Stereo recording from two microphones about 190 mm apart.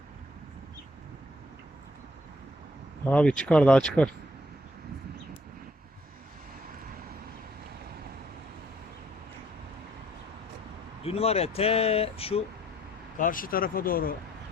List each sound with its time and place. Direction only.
3.1 s speech: 5° left (ahead or behind)
11.0 s speech: 30° left (ahead or behind)
13.1 s speech: 45° left (ahead or behind)